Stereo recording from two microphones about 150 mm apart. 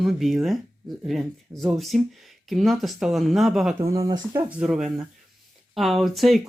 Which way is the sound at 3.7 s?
20° right (ahead or behind).